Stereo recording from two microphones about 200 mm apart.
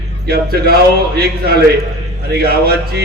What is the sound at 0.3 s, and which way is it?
Speech, 50° right (ahead or behind).